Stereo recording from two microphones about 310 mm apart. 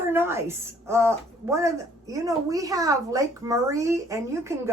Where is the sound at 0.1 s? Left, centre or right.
Centre.